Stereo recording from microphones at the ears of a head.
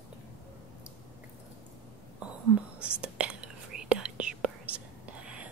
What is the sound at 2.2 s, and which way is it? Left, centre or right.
Whispering, right.